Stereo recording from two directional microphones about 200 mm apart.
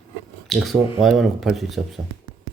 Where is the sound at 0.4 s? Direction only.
Centre (ahead or behind).